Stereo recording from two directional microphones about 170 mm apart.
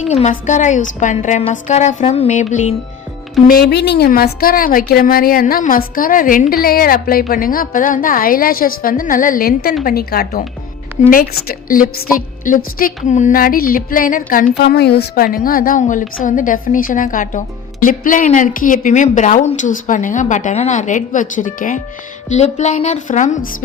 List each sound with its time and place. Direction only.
0.0 s a woman's voice: 45° left (ahead or behind)
3.4 s a woman's voice: 60° left (ahead or behind)
14.5 s a woman's voice: 75° left (ahead or behind); by 23.6 s 55° left (ahead or behind)